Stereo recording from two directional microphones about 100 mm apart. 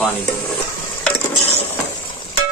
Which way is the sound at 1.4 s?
90° left.